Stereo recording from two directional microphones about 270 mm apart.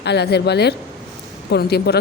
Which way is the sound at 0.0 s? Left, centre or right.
Left.